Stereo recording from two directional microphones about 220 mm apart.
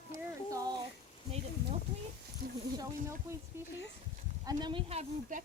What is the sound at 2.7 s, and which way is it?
Speech, 15° right (ahead or behind).